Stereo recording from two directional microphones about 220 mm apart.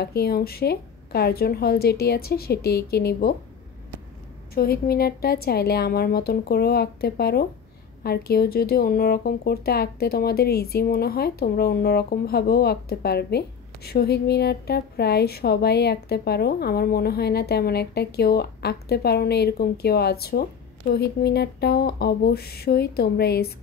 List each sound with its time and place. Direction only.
0.0 s speech: 45° left (ahead or behind)
4.6 s speech: 45° left (ahead or behind)